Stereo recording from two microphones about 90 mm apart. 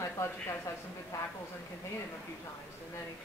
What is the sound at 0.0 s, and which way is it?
Speech, 30° left (ahead or behind).